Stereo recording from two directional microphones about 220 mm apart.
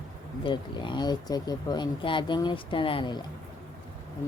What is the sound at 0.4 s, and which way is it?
Speech, 20° left (ahead or behind).